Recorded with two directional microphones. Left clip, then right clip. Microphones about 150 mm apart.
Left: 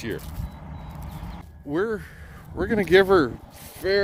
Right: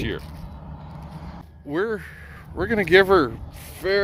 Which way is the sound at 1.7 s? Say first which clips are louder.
Right 1 dB; 35° left (ahead or behind).